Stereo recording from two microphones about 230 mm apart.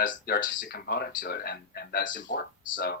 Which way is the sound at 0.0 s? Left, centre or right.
Left.